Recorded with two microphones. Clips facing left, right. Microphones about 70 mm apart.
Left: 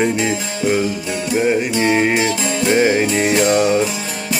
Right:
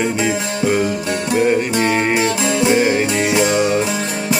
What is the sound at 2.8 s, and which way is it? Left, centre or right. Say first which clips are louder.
Music: left 1 dB; left.